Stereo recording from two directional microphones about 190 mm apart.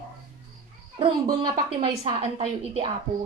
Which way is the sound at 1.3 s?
20° right (ahead or behind).